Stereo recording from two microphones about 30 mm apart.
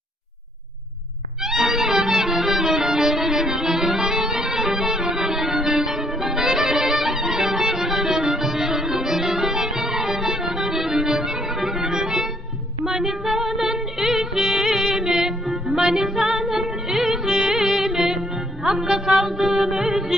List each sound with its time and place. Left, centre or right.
1.4 s music: centre
12.8 s female singing: centre
13.9 s music: centre